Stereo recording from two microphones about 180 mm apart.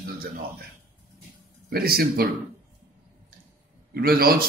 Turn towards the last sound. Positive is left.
turn(degrees=-55)  # may be behind; listen again after turning